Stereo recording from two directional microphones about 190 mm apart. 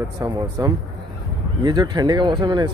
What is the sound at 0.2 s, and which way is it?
Speech, 20° right (ahead or behind).